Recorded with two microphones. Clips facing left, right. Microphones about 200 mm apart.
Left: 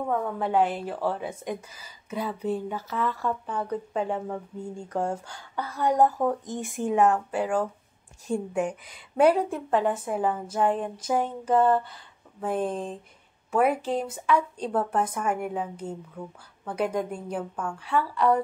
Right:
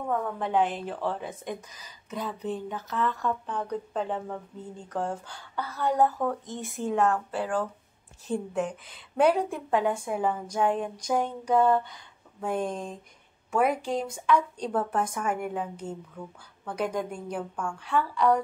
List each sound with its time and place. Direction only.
0.1 s a woman's voice: 5° left (ahead or behind)
10.6 s a woman's voice: 5° right (ahead or behind)
11.0 s a woman's voice: 5° left (ahead or behind)